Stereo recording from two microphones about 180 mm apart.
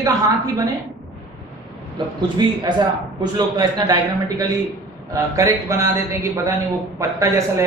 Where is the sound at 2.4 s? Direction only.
25° right (ahead or behind).